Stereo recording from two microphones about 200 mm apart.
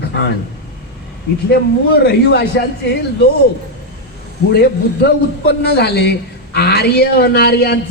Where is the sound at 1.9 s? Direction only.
55° left (ahead or behind).